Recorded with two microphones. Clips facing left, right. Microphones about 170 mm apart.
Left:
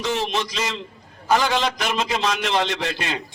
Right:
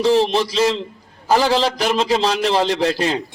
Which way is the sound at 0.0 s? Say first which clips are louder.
Right 9 dB; 35° right (ahead or behind).